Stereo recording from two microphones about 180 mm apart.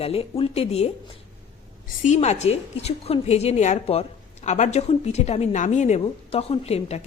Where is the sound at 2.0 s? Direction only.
40° left (ahead or behind).